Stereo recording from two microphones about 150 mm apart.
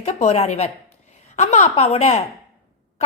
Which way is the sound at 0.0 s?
50° left (ahead or behind).